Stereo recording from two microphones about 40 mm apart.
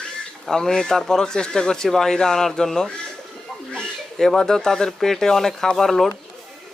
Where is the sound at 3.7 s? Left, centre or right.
Centre.